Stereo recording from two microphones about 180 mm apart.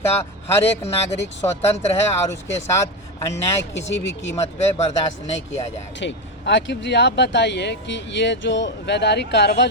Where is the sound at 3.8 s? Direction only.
90° left.